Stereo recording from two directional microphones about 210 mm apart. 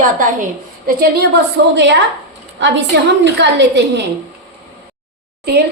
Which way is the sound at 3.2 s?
55° right (ahead or behind).